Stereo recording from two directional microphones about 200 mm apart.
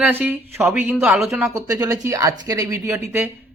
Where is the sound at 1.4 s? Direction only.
15° right (ahead or behind).